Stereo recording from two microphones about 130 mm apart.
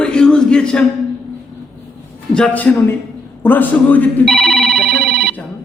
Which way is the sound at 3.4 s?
15° left (ahead or behind).